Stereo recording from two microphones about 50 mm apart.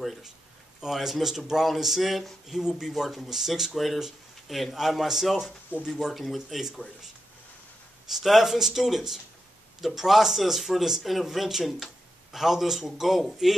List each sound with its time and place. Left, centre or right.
0.7 s speech: centre
8.1 s speech: centre